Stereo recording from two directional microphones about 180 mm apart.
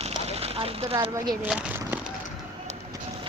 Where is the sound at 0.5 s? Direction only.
25° right (ahead or behind).